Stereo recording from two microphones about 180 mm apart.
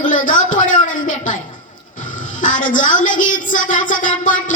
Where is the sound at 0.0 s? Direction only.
45° left (ahead or behind).